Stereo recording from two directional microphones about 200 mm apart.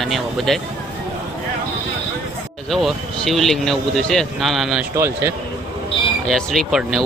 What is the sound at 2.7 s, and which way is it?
Speech, centre (ahead or behind).